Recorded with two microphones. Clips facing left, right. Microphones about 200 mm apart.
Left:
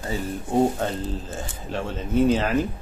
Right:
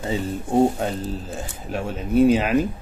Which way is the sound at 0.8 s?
10° right (ahead or behind).